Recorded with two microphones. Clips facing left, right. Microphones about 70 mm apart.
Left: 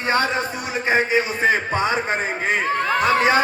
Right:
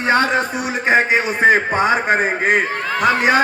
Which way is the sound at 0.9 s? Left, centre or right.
Right.